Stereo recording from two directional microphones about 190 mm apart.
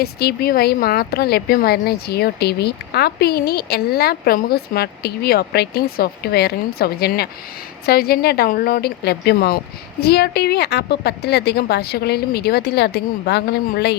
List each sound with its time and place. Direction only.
0.0 s speech: 55° left (ahead or behind)